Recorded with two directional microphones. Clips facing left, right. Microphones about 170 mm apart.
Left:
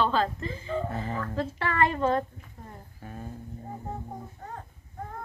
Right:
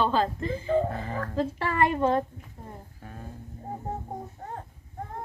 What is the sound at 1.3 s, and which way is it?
Speech, 15° right (ahead or behind).